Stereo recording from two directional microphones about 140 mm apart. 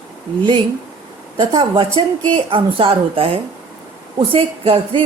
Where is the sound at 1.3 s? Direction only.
35° right (ahead or behind).